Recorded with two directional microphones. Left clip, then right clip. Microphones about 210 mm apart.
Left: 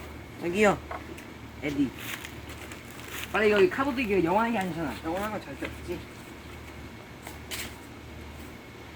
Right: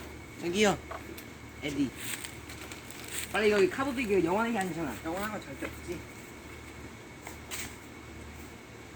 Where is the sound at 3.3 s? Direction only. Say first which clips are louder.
Left 3 dB; 15° right (ahead or behind).